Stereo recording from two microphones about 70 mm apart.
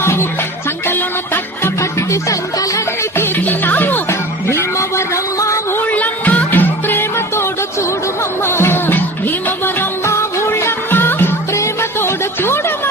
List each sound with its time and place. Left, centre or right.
0.0 s music: left
1.8 s music: left
3.2 s music: left
5.7 s music: left
11.5 s music: left